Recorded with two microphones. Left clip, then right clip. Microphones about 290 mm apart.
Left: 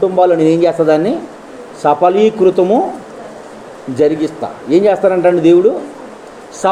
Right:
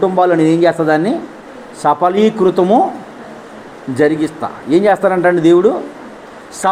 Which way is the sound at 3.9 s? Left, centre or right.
Centre.